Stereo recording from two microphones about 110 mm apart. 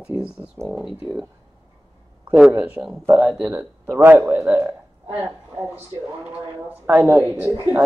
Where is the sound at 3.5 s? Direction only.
20° right (ahead or behind).